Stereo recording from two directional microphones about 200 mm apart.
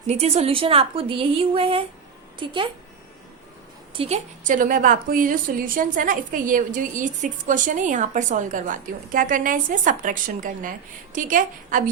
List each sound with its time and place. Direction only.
0.1 s a woman's voice: 30° right (ahead or behind)
3.9 s a woman's voice: 30° right (ahead or behind)